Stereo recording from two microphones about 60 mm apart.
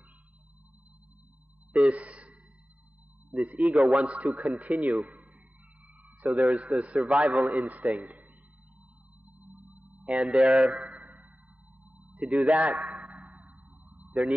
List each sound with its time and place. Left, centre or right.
1.7 s a sound: right
3.3 s a man's voice: right
3.7 s a man's voice: centre
4.0 s a man's voice: right
6.5 s a man's voice: right
10.0 s speech: centre
10.9 s a sound: right
12.0 s a man's voice: right
13.2 s sonar: right